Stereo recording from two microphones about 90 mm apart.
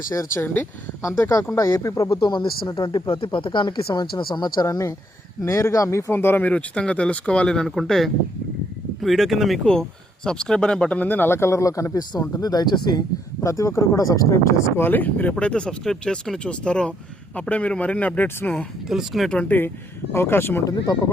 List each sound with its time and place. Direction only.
0.1 s speech: 40° left (ahead or behind)
0.4 s speech: 20° left (ahead or behind)
1.0 s speech: 35° left (ahead or behind)
2.1 s speech: 65° left (ahead or behind)
2.6 s speech: 45° left (ahead or behind)
3.1 s speech: 80° left; by 4.6 s 55° left (ahead or behind)
4.6 s speech: 40° left (ahead or behind)
12.2 s speech: 45° left (ahead or behind)
13.4 s speech: 35° left (ahead or behind)
14.8 s speech: 20° left (ahead or behind)
18.9 s speech: centre (ahead or behind)
19.3 s speech: 15° left (ahead or behind)